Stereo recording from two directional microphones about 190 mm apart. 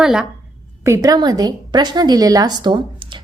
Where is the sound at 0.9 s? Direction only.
20° right (ahead or behind).